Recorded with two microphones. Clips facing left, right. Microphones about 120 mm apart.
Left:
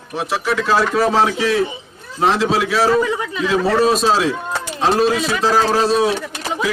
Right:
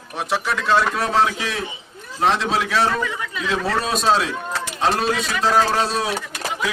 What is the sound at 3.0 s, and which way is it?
Speech, 35° left (ahead or behind).